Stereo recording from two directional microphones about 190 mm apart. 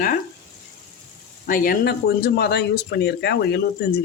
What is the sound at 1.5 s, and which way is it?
Speech, 50° left (ahead or behind).